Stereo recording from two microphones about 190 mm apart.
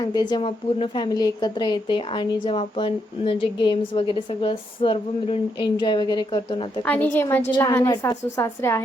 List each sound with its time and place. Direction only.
0.0 s a woman's voice: 20° left (ahead or behind)
6.8 s a woman's voice: 10° left (ahead or behind)